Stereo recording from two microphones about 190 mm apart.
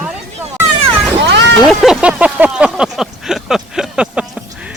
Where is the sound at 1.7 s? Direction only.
Centre (ahead or behind).